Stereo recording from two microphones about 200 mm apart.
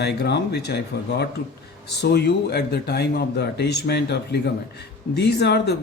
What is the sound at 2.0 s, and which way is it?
A man's voice, 55° left (ahead or behind).